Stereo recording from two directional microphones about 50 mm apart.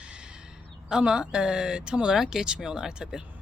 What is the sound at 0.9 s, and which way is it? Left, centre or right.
Speech, centre.